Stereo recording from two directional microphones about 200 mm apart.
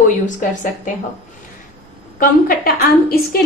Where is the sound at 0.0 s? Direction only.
40° left (ahead or behind).